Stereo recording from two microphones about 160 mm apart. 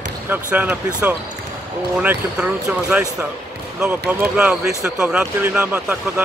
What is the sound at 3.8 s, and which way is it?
Speech, 10° right (ahead or behind).